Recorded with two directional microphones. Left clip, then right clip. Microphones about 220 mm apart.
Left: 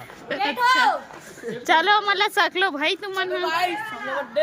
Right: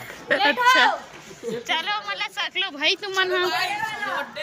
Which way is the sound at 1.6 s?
30° left (ahead or behind).